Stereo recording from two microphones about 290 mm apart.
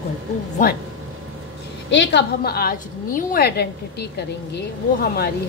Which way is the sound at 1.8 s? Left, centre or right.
Left.